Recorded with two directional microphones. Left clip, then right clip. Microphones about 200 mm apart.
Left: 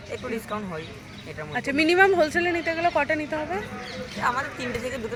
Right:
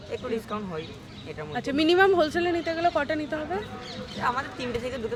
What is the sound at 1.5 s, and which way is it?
Speech, 5° right (ahead or behind).